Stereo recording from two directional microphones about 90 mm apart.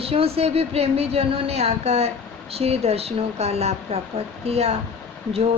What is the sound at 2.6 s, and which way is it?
Speech, 90° right.